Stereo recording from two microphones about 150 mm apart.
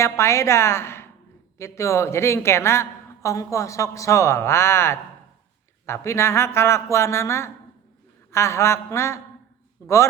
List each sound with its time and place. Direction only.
0.0 s a woman's voice: 20° left (ahead or behind)